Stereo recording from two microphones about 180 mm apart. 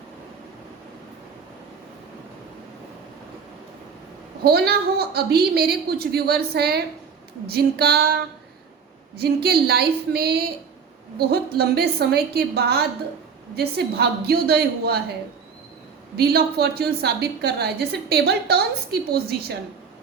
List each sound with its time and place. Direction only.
4.4 s a woman's voice: 60° right (ahead or behind)
11.5 s a woman's voice: 60° right (ahead or behind)
16.1 s a woman's voice: 60° right (ahead or behind)